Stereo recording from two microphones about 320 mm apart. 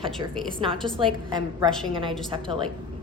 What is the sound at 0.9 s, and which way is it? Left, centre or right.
A woman's voice, centre.